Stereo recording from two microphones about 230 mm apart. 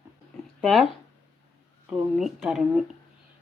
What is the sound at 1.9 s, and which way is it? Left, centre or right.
Speech, centre.